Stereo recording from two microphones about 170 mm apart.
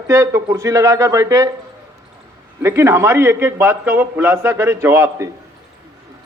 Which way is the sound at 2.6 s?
15° right (ahead or behind).